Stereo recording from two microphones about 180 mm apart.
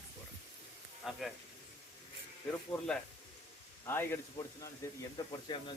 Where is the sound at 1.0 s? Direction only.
5° right (ahead or behind).